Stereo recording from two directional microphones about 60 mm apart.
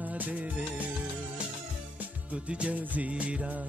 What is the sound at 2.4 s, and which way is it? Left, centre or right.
Speech, right.